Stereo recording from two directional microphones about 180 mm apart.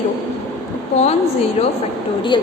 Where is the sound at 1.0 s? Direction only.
35° left (ahead or behind).